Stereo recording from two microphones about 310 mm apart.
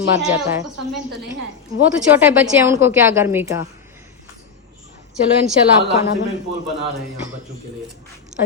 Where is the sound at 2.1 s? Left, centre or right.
Centre.